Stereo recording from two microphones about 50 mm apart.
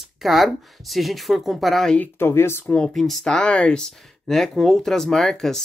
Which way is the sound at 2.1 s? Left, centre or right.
Left.